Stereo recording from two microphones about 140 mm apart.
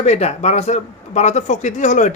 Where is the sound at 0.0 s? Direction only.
50° left (ahead or behind).